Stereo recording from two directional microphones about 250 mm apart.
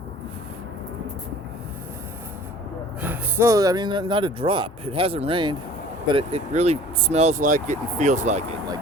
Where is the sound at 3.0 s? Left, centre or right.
Centre; by 8.4 s right.